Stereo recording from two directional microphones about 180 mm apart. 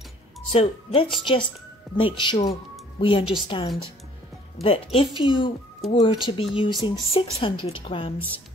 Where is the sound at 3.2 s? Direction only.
5° right (ahead or behind).